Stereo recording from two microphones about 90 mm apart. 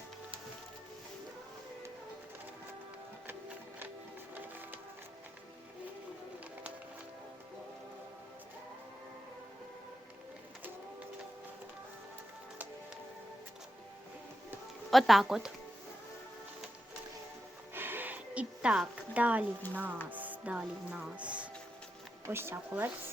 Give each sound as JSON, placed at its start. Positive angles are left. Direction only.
{"t": 14.8, "sound": "speech", "side_deg": 0}
{"t": 17.7, "sound": "a sound", "side_deg": -25}
{"t": 19.1, "sound": "speech", "side_deg": -15}
{"t": 19.7, "sound": "stir", "side_deg": -20}
{"t": 20.1, "sound": "music", "side_deg": -20}
{"t": 21.2, "sound": "speech", "side_deg": -15}
{"t": 22.3, "sound": "stir", "side_deg": -25}